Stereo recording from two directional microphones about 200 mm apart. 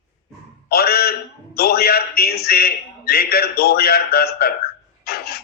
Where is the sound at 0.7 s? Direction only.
50° left (ahead or behind).